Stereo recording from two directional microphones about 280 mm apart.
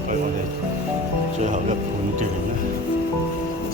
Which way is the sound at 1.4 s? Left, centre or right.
Right.